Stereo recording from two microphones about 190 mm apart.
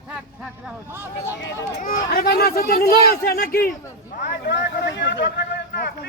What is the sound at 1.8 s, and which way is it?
A man's voice, 50° left (ahead or behind).